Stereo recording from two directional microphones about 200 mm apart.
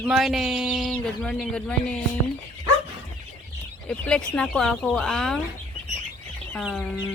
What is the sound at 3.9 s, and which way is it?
Speech, 5° left (ahead or behind).